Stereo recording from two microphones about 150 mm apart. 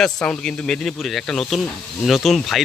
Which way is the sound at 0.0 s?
5° left (ahead or behind).